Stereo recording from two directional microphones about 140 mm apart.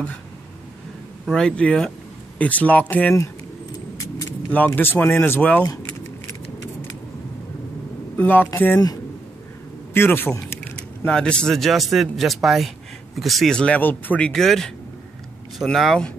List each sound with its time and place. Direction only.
1.2 s speech: 5° left (ahead or behind)
8.2 s speech: 15° left (ahead or behind)
9.9 s a man's voice: 15° left (ahead or behind)